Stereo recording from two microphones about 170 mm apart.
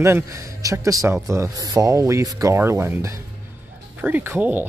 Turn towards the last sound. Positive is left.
turn(degrees=-10)  # may be behind; listen again after turning